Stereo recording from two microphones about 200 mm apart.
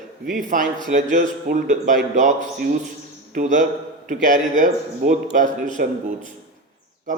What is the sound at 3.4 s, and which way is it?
A man's voice, 40° right (ahead or behind).